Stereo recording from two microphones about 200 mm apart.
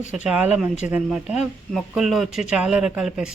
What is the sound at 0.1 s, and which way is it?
Speech, 5° right (ahead or behind).